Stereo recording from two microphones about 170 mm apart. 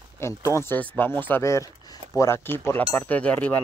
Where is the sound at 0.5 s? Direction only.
15° left (ahead or behind).